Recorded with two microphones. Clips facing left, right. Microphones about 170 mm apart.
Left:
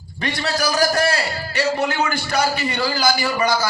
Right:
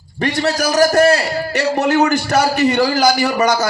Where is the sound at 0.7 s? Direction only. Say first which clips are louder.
Right 8 dB; 40° right (ahead or behind).